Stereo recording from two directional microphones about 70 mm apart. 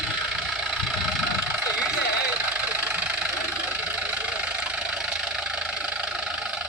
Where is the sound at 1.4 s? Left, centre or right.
Centre.